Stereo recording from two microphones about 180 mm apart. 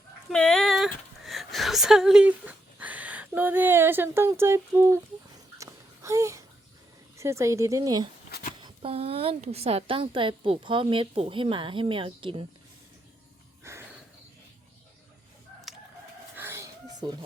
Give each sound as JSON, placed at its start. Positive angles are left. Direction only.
{"t": 0.3, "sound": "dog", "side_deg": 5}
{"t": 1.2, "sound": "speech", "side_deg": 0}
{"t": 5.5, "sound": "babbling", "side_deg": -15}
{"t": 7.2, "sound": "speech", "side_deg": -15}
{"t": 8.6, "sound": "a woman's voice", "side_deg": -30}
{"t": 15.7, "sound": "crowing", "side_deg": 0}
{"t": 16.3, "sound": "a sound", "side_deg": -10}